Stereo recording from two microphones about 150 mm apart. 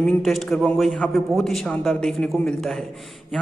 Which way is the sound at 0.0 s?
Centre (ahead or behind).